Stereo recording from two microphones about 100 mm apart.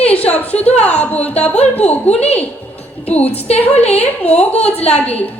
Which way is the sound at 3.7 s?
90° left.